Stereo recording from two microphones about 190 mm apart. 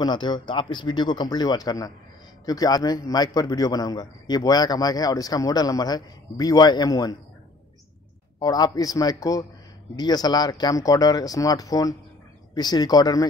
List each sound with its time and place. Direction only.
0.0 s a man's voice: 25° left (ahead or behind)
8.4 s a man's voice: 20° left (ahead or behind)